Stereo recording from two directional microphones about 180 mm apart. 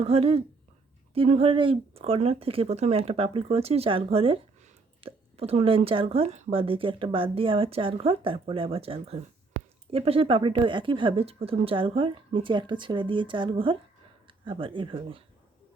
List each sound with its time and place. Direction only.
0.0 s a woman's voice: 35° right (ahead or behind)